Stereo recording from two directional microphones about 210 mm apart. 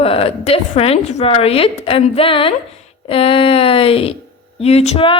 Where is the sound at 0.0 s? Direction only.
25° left (ahead or behind).